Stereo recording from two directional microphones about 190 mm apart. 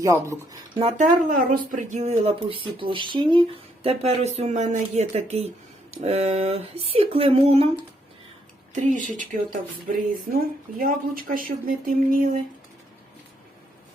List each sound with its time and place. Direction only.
0.0 s speech: 15° right (ahead or behind)
0.8 s speech: 30° right (ahead or behind)
1.5 s speech: 45° right (ahead or behind)
8.7 s speech: 40° right (ahead or behind)